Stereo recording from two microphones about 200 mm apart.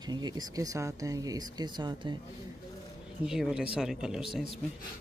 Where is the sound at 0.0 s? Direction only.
20° right (ahead or behind).